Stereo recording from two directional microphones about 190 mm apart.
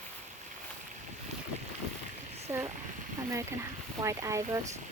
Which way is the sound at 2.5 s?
15° right (ahead or behind).